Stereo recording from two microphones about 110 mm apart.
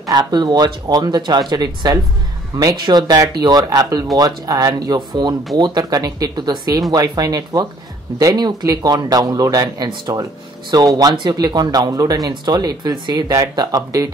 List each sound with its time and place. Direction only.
0.1 s speech: 40° right (ahead or behind)